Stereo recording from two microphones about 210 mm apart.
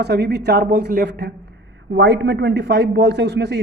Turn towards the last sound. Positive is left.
turn(degrees=-55)  # may be behind; listen again after turning